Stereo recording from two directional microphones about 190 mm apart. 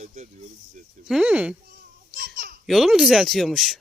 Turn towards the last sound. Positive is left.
turn(degrees=0)  # may be behind; listen again after turning